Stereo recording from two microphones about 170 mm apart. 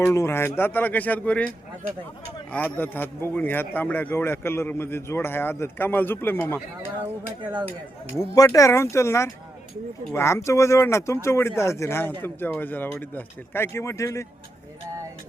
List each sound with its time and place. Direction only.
0.0 s a man's voice: 15° left (ahead or behind)
2.5 s a man's voice: 10° left (ahead or behind)
8.1 s a man's voice: 15° left (ahead or behind)